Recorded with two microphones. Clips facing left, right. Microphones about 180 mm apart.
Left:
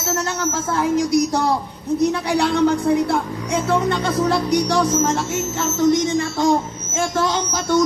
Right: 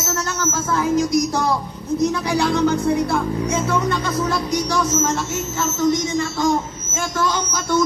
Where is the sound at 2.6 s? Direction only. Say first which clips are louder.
Left 1 dB; 35° left (ahead or behind).